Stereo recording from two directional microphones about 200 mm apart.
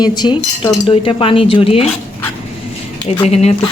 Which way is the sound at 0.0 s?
20° left (ahead or behind).